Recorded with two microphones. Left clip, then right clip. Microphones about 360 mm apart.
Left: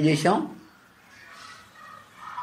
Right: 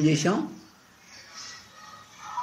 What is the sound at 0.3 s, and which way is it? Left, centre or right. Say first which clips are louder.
Speech: left 4 dB; centre.